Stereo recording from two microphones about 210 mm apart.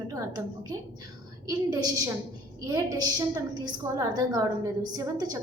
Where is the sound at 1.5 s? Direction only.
15° right (ahead or behind).